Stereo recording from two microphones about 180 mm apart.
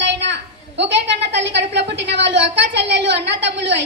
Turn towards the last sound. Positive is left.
turn(degrees=-75)  # may be behind; listen again after turning